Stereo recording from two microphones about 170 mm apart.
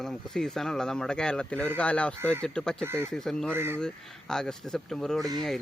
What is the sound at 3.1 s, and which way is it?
Speech, 5° left (ahead or behind).